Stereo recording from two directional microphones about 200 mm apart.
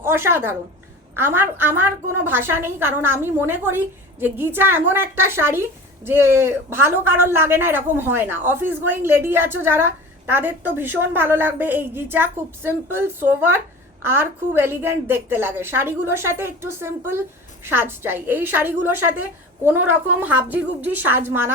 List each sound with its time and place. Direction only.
0.0 s a man's voice: 10° right (ahead or behind)